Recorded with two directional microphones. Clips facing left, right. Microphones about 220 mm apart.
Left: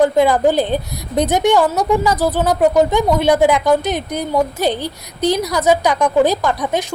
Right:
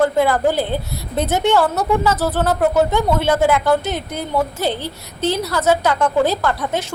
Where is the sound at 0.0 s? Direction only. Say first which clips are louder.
Left 3 dB; 15° left (ahead or behind).